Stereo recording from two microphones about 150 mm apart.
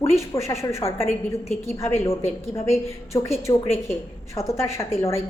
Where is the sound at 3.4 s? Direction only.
15° left (ahead or behind).